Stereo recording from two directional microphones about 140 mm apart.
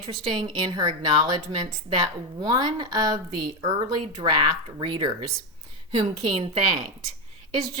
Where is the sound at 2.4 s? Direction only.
30° right (ahead or behind).